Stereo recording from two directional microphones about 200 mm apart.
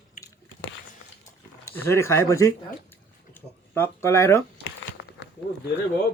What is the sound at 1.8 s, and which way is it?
Speech, 15° left (ahead or behind).